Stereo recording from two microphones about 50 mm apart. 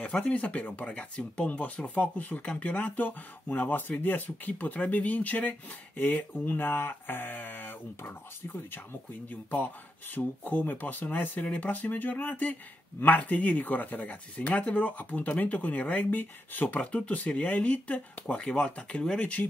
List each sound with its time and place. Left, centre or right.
0.0 s speech: left
9.3 s speech: left
16.8 s speech: left
18.2 s speech: centre